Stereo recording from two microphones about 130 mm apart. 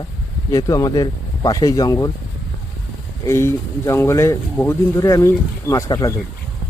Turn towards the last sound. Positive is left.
turn(degrees=25)  # may be behind; listen again after turning